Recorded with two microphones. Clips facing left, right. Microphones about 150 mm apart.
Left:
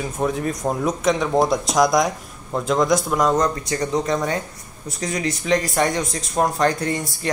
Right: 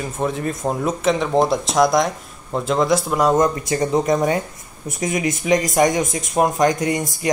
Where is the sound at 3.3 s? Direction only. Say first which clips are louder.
Right 3 dB; 20° right (ahead or behind).